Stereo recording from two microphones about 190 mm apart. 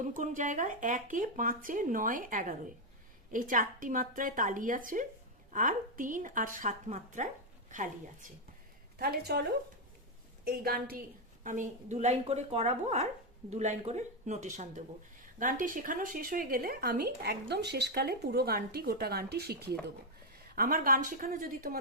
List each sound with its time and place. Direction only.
0.0 s a woman's voice: 40° right (ahead or behind)
9.0 s a woman's voice: 55° right (ahead or behind)